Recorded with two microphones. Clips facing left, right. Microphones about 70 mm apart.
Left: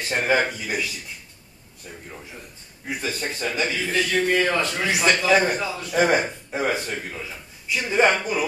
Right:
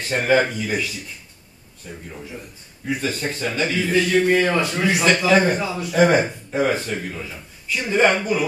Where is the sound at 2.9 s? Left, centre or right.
Centre.